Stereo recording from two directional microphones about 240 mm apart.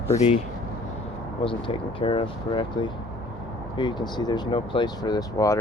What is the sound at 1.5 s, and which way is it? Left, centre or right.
Speech, left.